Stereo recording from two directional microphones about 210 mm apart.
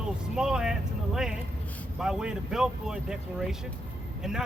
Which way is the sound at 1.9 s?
5° right (ahead or behind).